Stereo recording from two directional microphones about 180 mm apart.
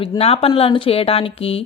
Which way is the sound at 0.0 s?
30° left (ahead or behind).